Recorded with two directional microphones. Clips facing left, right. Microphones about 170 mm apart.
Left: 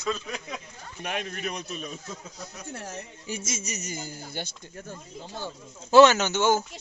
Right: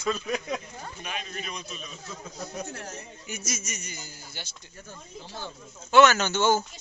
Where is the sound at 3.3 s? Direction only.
30° left (ahead or behind); by 4.5 s 50° left (ahead or behind).